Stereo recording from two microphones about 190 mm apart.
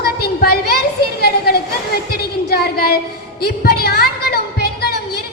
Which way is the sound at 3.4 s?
55° left (ahead or behind).